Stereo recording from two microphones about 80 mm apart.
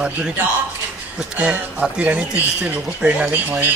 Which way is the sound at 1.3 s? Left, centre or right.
Centre.